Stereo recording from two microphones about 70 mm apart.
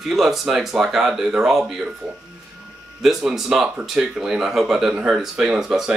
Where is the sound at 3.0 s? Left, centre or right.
Centre.